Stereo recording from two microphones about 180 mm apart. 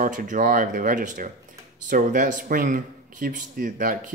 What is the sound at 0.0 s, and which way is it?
Speech, 45° right (ahead or behind).